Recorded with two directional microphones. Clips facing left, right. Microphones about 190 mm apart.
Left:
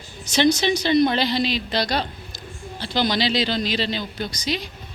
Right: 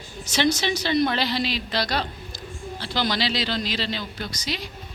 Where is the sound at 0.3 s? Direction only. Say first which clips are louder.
Left 4 dB; 5° right (ahead or behind).